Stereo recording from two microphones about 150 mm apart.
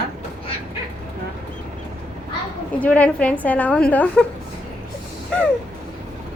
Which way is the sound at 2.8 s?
10° left (ahead or behind).